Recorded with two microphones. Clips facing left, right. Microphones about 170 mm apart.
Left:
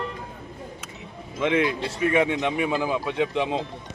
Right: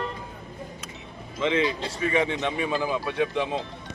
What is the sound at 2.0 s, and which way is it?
Speech, 10° left (ahead or behind).